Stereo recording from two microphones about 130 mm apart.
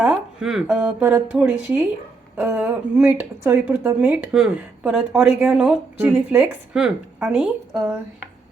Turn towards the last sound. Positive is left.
turn(degrees=-5)  # may be behind; listen again after turning